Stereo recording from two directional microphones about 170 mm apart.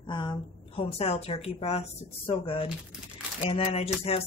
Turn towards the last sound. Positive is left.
turn(degrees=35)  # may be behind; listen again after turning